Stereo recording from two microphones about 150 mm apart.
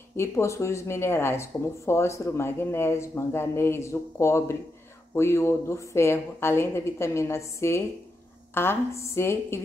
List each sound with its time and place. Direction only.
0.1 s speech: 15° left (ahead or behind)